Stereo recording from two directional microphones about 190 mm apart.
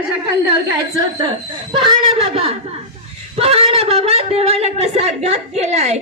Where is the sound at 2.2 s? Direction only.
30° right (ahead or behind).